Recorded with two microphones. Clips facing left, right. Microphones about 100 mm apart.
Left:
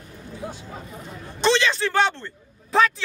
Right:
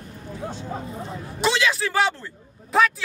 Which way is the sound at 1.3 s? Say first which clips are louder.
Left 2 dB; 5° right (ahead or behind).